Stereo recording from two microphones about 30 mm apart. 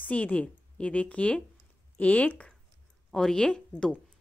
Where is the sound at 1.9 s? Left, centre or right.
Left.